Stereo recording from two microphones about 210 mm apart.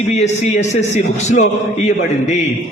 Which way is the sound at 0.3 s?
35° left (ahead or behind).